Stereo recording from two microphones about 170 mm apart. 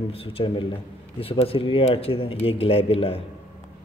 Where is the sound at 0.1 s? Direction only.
35° left (ahead or behind).